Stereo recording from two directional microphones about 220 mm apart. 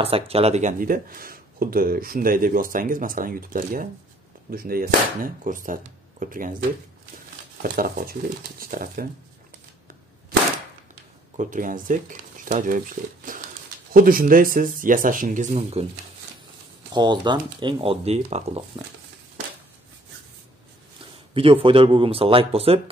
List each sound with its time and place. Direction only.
0.0 s speech: 25° right (ahead or behind)
7.6 s speech: 40° right (ahead or behind)
11.3 s speech: 35° right (ahead or behind)
16.9 s speech: 20° right (ahead or behind)
21.3 s speech: 25° right (ahead or behind)